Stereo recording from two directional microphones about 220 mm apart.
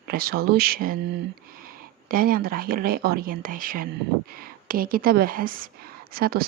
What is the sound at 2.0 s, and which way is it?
Speech, 40° right (ahead or behind).